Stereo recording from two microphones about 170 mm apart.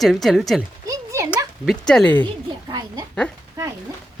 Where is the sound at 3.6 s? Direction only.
20° right (ahead or behind).